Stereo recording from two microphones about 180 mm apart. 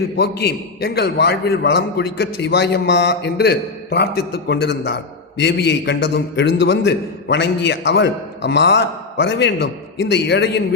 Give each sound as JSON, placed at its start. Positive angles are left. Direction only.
{"t": 0.2, "sound": "a man's voice", "side_deg": 65}